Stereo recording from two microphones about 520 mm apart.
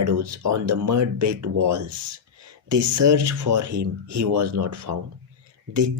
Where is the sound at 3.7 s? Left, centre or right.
Right.